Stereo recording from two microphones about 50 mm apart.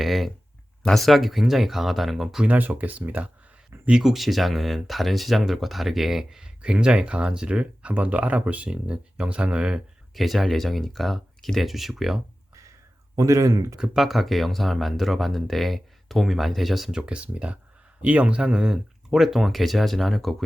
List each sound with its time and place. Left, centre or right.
0.0 s speech: centre
2.5 s speech: right
4.0 s speech: centre
10.2 s speech: centre
13.2 s speech: right
13.9 s speech: centre
16.9 s speech: right; by 20.3 s centre